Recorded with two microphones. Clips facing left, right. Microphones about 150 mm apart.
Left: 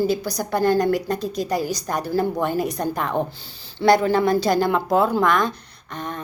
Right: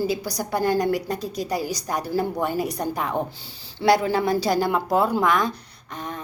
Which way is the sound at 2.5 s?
45° left (ahead or behind).